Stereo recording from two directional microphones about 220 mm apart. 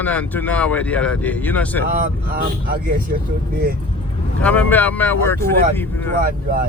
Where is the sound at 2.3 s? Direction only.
45° right (ahead or behind).